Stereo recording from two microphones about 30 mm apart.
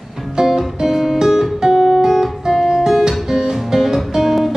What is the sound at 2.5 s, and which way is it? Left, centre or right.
Music, centre.